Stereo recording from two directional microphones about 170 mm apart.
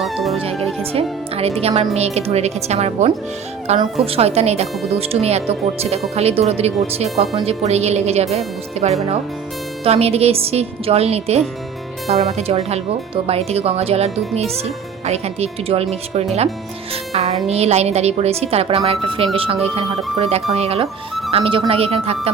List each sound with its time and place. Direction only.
0.0 s music: centre (ahead or behind)
1.4 s speech: 35° right (ahead or behind)